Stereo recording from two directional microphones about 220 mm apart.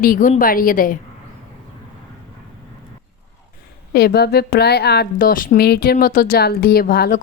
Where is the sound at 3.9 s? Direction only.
45° left (ahead or behind).